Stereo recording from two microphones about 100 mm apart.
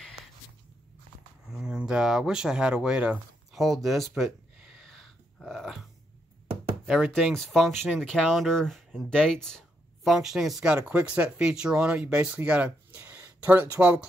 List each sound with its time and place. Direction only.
1.5 s speech: 5° right (ahead or behind)
4.6 s a sound: 5° right (ahead or behind)
6.9 s speech: 5° right (ahead or behind)